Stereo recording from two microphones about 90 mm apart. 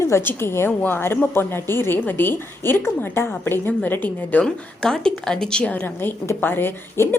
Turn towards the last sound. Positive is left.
turn(degrees=25)  # may be behind; listen again after turning